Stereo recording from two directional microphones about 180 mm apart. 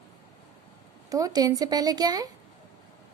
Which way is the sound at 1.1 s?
20° right (ahead or behind).